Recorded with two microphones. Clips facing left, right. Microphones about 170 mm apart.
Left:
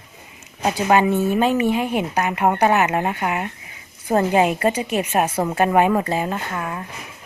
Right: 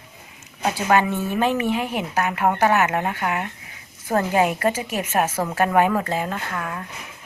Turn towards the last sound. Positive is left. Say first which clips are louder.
# left 2 dB
turn(degrees=15)  # may be behind; listen again after turning